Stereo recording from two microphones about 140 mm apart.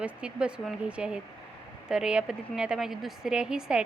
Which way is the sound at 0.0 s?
5° right (ahead or behind).